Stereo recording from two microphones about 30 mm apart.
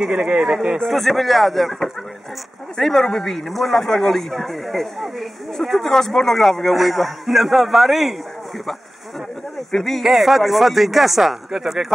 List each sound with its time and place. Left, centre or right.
0.0 s speech: right
0.4 s speech: centre
0.8 s a man's voice: centre
9.7 s speech: centre
10.0 s speech: centre